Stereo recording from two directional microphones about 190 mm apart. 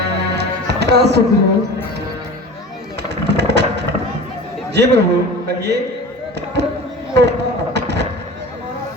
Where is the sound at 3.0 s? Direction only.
65° right (ahead or behind).